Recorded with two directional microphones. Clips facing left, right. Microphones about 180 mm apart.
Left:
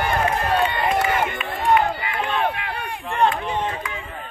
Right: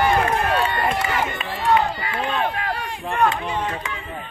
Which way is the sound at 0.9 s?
55° left (ahead or behind).